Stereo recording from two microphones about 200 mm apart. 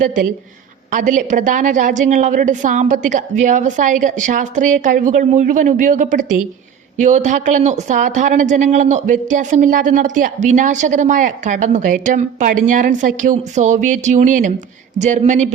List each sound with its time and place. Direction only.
0.9 s speech: 40° right (ahead or behind)